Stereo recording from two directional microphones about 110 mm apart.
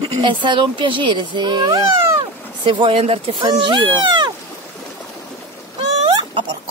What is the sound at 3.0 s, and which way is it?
Speech, 60° right (ahead or behind).